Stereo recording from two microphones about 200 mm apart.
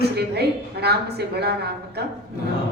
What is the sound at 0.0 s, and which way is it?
A woman's voice, 55° right (ahead or behind).